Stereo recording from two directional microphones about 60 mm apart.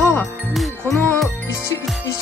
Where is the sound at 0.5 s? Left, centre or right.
Centre.